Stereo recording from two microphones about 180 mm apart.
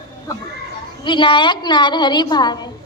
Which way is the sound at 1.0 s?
25° left (ahead or behind).